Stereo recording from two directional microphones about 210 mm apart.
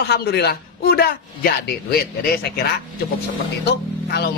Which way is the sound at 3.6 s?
50° left (ahead or behind).